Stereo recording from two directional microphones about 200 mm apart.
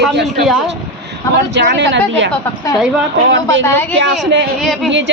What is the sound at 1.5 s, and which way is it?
Speech, 60° right (ahead or behind).